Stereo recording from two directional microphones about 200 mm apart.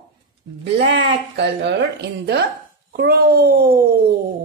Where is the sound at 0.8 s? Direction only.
55° right (ahead or behind).